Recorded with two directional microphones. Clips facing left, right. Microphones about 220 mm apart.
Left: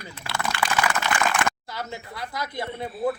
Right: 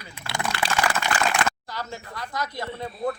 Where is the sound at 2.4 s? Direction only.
25° left (ahead or behind).